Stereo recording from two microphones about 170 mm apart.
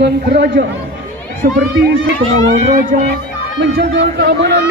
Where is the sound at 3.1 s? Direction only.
85° right.